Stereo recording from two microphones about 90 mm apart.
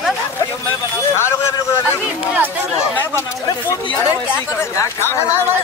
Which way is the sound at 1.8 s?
20° right (ahead or behind).